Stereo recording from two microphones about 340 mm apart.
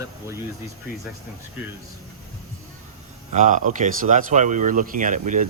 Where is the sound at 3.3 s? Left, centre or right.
Right.